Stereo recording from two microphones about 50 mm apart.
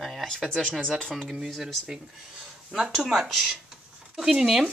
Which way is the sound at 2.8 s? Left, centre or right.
Centre.